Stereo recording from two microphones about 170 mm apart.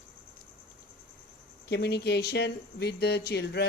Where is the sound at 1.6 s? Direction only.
75° left (ahead or behind).